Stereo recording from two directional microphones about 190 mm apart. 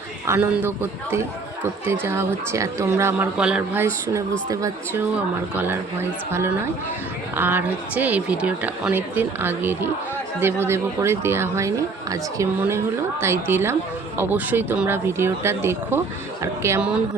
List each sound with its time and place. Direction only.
0.3 s a man's voice: 10° right (ahead or behind)
4.1 s a man's voice: 15° right (ahead or behind)